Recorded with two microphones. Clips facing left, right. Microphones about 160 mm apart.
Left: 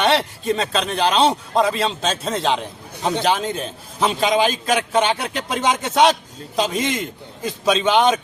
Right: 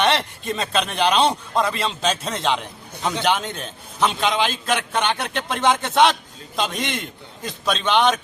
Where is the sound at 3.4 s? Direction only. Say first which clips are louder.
Left 6 dB; centre (ahead or behind).